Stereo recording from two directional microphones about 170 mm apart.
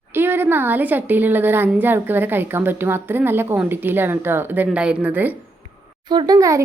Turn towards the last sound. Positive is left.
turn(degrees=-20)  # may be behind; listen again after turning